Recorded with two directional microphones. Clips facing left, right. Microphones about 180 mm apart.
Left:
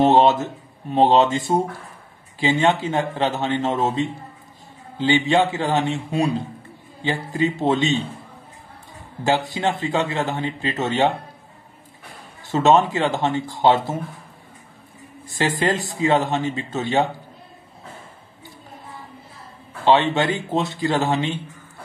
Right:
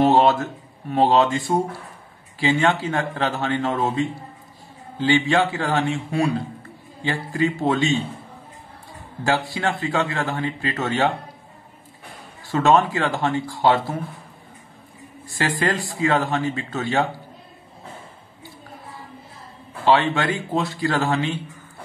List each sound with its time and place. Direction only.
0.0 s a man's voice: 20° left (ahead or behind)
9.2 s a man's voice: 20° left (ahead or behind)
12.4 s a man's voice: 20° left (ahead or behind)
15.2 s a man's voice: 20° left (ahead or behind)
19.8 s a man's voice: 20° left (ahead or behind)